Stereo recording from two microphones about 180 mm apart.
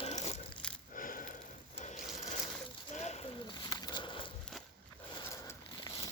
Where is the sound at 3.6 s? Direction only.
25° left (ahead or behind).